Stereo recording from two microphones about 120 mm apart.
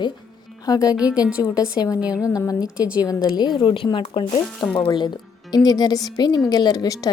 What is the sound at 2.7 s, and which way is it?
Speech, 10° right (ahead or behind).